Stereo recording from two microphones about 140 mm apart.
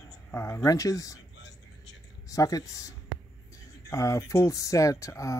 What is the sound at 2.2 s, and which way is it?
Speech, 25° left (ahead or behind).